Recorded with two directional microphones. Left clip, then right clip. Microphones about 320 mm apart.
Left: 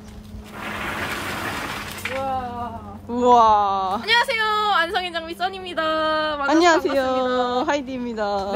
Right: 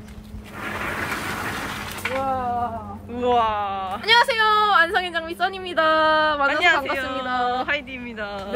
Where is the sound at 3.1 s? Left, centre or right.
Centre.